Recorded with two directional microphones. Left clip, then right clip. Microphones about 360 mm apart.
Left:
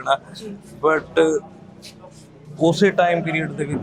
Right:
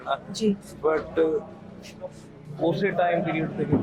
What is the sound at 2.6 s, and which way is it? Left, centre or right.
Speech, left.